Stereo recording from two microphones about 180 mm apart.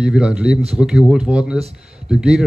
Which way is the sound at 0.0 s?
5° right (ahead or behind).